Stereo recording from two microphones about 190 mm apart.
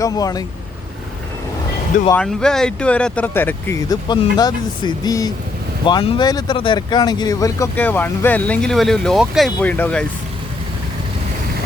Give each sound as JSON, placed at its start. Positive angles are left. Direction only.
{"t": 0.0, "sound": "speech", "side_deg": 20}
{"t": 2.1, "sound": "speech", "side_deg": 5}